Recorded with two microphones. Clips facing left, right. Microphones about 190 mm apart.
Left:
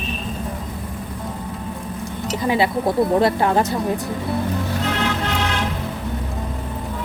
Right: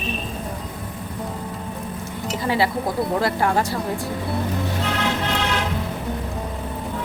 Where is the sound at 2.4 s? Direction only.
20° left (ahead or behind).